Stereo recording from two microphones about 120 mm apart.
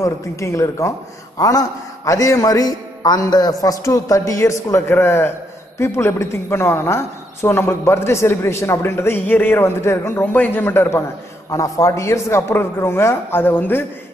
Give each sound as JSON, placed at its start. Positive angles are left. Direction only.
{"t": 0.0, "sound": "a woman's voice", "side_deg": 25}